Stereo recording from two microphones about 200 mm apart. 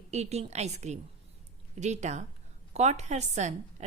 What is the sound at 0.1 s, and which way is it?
A woman's voice, 35° right (ahead or behind).